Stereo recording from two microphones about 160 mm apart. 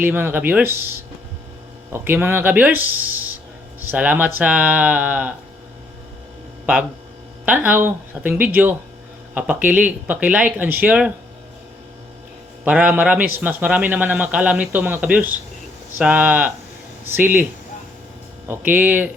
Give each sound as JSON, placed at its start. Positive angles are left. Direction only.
{"t": 0.0, "sound": "a man's voice", "side_deg": -10}
{"t": 7.4, "sound": "a man's voice", "side_deg": -10}
{"t": 12.6, "sound": "a man's voice", "side_deg": -10}
{"t": 18.4, "sound": "a man's voice", "side_deg": -15}